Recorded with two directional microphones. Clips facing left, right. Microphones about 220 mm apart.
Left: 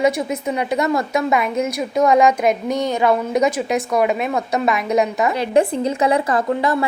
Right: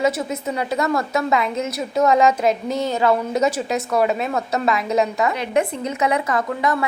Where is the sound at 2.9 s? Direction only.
15° left (ahead or behind).